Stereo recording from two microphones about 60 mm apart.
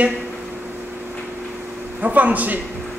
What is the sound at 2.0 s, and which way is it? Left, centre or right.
Speech, right.